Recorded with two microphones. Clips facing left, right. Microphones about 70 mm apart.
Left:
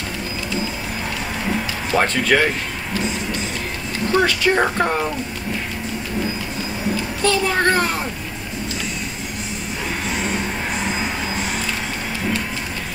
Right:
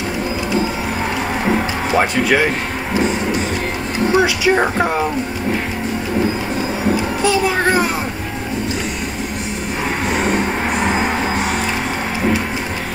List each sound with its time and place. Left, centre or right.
1.9 s speech: centre
4.1 s speech: centre
7.2 s speech: centre
10.0 s vehicle: right